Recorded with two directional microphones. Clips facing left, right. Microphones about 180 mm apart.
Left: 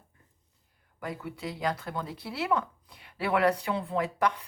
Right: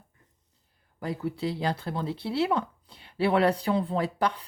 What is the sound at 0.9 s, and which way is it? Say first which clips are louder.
Speech: right 6 dB; 30° right (ahead or behind).